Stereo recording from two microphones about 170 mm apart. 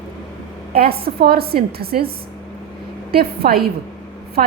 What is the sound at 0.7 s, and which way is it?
A woman's voice, 65° right (ahead or behind).